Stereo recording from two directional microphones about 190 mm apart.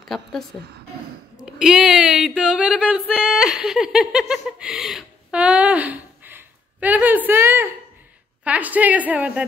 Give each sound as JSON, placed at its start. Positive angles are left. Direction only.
{"t": 0.1, "sound": "a woman's voice", "side_deg": 0}
{"t": 1.4, "sound": "a sound", "side_deg": -5}
{"t": 8.5, "sound": "a woman's voice", "side_deg": -10}